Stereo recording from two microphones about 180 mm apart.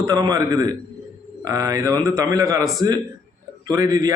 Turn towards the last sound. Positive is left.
turn(degrees=-20)  # may be behind; listen again after turning